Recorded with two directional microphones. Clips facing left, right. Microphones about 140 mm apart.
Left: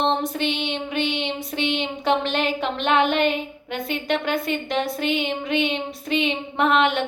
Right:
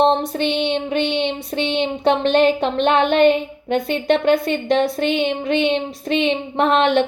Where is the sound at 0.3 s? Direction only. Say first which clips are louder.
Right 4 dB; 35° right (ahead or behind).